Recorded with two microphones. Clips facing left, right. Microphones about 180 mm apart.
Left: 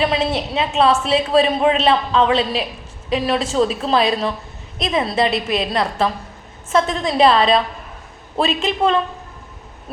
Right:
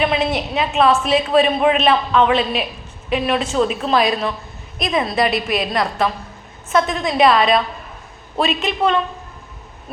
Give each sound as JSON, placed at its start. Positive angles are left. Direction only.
{"t": 0.0, "sound": "a woman's voice", "side_deg": 30}